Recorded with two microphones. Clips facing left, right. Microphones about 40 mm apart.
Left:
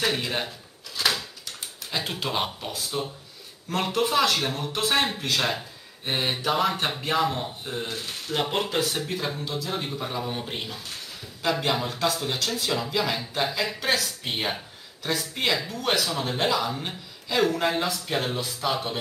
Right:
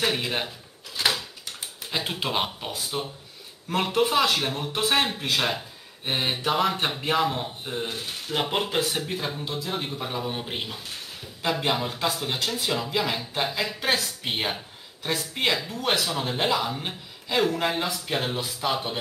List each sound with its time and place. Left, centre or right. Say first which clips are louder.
0.0 s speech: even; centre
0.9 s a sound: even; centre
3.7 s speech: right 1 dB; centre
6.0 s mantra: even; centre
7.0 s speech: even; centre